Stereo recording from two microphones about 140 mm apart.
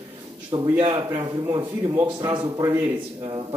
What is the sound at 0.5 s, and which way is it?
A man's voice, 40° right (ahead or behind).